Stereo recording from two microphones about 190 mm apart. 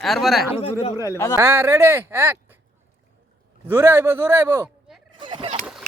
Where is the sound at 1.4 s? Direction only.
15° right (ahead or behind).